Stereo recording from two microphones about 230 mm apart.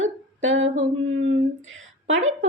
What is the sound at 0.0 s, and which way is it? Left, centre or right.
A woman's voice, right.